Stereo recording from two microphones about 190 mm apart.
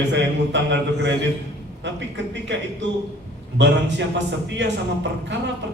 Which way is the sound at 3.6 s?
70° right (ahead or behind).